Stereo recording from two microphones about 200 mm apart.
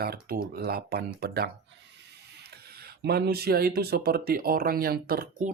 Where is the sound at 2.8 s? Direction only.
50° right (ahead or behind).